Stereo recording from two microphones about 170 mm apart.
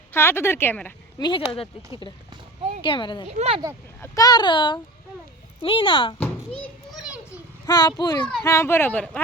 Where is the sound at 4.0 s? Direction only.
15° left (ahead or behind).